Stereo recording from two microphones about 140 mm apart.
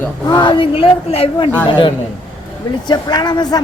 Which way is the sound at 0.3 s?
35° left (ahead or behind).